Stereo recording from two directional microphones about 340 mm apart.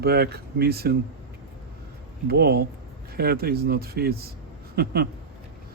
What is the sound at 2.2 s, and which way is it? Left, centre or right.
Speech, right.